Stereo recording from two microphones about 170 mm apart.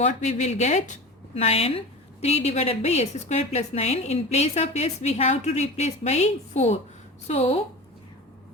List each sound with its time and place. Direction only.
0.0 s a woman's voice: 40° left (ahead or behind)